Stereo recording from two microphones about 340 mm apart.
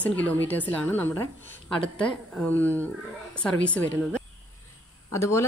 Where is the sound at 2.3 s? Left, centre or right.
Centre.